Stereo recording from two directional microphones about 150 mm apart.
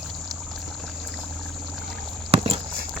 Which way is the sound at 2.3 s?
40° right (ahead or behind).